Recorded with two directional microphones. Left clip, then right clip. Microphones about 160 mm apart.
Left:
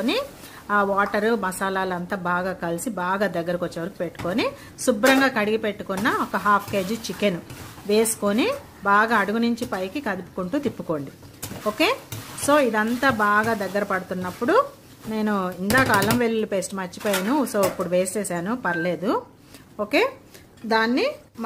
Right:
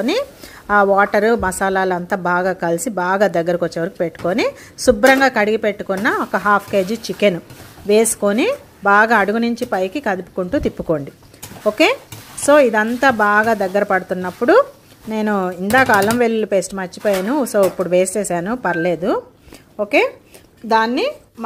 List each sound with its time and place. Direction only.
0.7 s a woman's voice: 35° right (ahead or behind)